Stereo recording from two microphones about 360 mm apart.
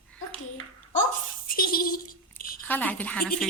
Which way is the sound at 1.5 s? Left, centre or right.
Left.